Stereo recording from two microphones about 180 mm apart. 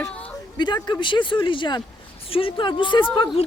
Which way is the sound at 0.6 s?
25° left (ahead or behind).